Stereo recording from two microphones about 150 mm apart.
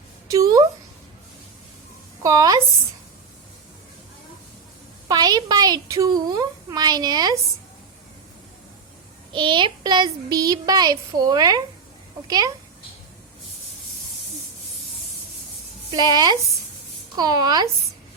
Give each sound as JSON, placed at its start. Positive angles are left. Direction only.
{"t": 0.3, "sound": "a sound", "side_deg": -25}
{"t": 2.2, "sound": "a woman's voice", "side_deg": -25}
{"t": 5.0, "sound": "a woman's voice", "side_deg": -25}
{"t": 9.3, "sound": "a woman's voice", "side_deg": -30}
{"t": 15.9, "sound": "a woman's voice", "side_deg": -30}